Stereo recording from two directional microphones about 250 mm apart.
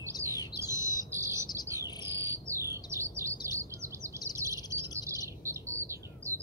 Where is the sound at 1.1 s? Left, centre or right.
Centre.